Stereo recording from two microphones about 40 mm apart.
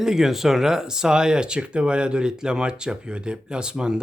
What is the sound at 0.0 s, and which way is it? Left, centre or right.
Speech, centre.